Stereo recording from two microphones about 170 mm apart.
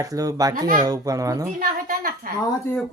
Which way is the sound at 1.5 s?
55° right (ahead or behind).